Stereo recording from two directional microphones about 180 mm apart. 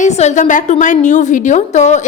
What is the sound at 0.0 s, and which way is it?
A woman's voice, 40° left (ahead or behind).